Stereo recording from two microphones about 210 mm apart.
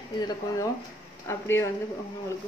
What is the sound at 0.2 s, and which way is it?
A man's voice, 20° left (ahead or behind).